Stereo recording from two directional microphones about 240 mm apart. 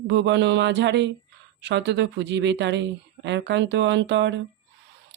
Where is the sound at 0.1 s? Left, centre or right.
Right.